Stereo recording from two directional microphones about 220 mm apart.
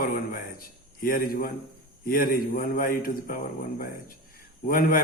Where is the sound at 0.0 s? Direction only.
40° left (ahead or behind).